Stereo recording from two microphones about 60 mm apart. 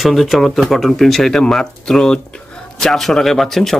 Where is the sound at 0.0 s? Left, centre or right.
Centre.